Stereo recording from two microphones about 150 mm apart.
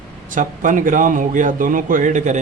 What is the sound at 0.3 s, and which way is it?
Speech, 60° right (ahead or behind).